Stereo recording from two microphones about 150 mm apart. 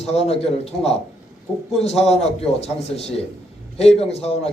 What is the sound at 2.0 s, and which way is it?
A man's voice, 45° left (ahead or behind).